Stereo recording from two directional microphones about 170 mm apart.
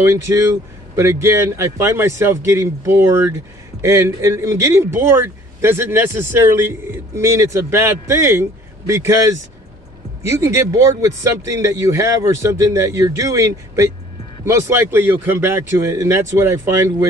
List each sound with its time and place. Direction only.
0.0 s speech: 15° right (ahead or behind)
10.2 s speech: 15° right (ahead or behind)